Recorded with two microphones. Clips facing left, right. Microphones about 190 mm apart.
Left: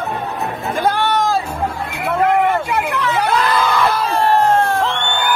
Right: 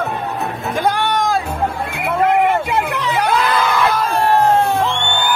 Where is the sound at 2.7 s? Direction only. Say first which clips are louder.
Even; 15° right (ahead or behind).